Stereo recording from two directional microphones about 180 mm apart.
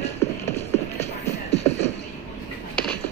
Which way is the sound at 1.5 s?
35° left (ahead or behind).